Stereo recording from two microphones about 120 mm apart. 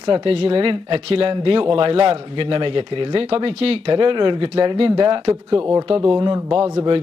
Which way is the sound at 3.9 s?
45° right (ahead or behind).